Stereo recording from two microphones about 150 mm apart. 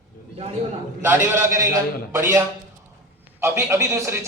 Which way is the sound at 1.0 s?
15° right (ahead or behind).